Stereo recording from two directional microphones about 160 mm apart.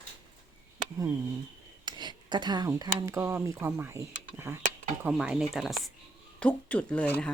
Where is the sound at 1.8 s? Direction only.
30° right (ahead or behind).